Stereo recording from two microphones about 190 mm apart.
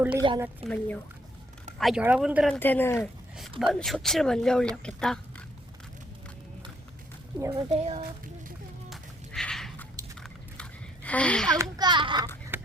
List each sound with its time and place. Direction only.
0.2 s a child's voice: 20° right (ahead or behind)
0.6 s speech: 10° left (ahead or behind)
1.8 s a woman's voice: 5° right (ahead or behind)
2.6 s speech: 10° left (ahead or behind)
3.0 s a woman's voice: centre (ahead or behind)
7.5 s speech: 30° right (ahead or behind)
8.9 s a sound: 5° left (ahead or behind)
11.5 s a child's voice: 20° right (ahead or behind)
12.5 s a sound: 10° right (ahead or behind)